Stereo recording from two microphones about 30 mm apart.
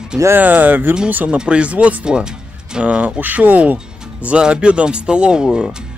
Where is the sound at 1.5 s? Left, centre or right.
Right.